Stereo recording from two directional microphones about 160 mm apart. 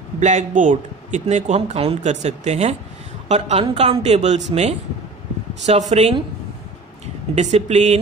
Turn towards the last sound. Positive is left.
turn(degrees=-45)  # may be behind; listen again after turning